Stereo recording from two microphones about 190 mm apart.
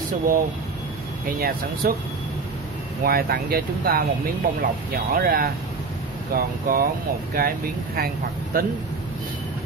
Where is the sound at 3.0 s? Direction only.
50° right (ahead or behind).